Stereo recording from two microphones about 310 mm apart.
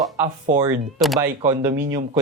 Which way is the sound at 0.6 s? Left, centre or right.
Centre.